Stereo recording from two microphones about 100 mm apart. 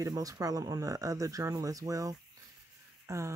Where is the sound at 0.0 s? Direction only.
35° right (ahead or behind).